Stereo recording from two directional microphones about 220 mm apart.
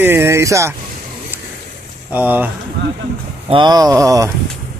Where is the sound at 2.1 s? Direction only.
10° right (ahead or behind).